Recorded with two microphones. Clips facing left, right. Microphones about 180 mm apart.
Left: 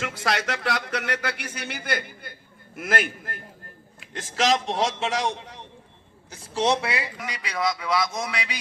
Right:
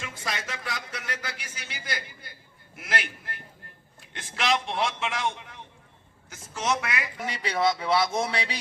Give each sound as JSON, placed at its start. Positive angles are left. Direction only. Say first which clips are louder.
{"t": 0.0, "sound": "a man's voice", "louder": "left 8 dB", "side_deg": 80}
{"t": 7.2, "sound": "speech", "louder": "right 2 dB", "side_deg": -30}